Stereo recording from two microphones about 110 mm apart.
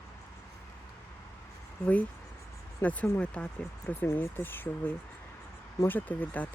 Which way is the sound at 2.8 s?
10° left (ahead or behind).